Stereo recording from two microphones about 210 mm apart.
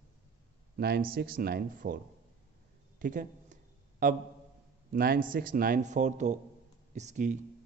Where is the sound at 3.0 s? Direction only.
40° right (ahead or behind).